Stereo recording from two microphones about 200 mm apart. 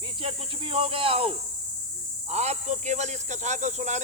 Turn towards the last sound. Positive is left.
turn(degrees=-35)  # may be behind; listen again after turning